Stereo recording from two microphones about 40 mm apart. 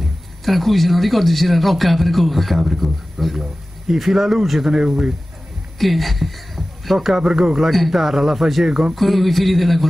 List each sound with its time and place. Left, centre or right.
0.0 s a man's voice: centre
5.8 s a man's voice: centre